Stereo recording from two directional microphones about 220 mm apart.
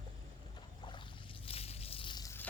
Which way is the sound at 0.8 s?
20° left (ahead or behind).